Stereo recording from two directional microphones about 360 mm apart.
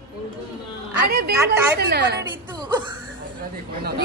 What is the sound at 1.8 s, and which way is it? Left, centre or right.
Speech, right.